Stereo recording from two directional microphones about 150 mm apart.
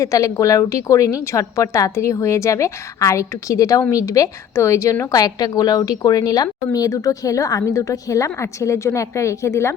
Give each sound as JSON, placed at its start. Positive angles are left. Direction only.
{"t": 0.0, "sound": "a woman's voice", "side_deg": 20}